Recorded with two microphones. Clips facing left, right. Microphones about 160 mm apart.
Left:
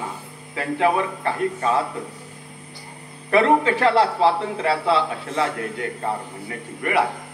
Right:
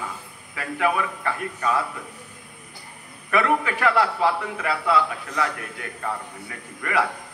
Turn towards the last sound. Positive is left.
turn(degrees=25)  # may be behind; listen again after turning